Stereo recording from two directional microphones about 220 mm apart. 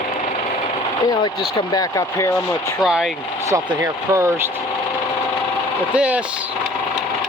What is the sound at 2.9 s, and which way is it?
Speech, centre (ahead or behind).